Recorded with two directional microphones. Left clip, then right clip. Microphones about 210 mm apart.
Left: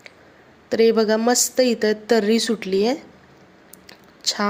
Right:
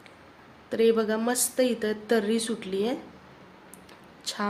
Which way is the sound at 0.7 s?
30° left (ahead or behind).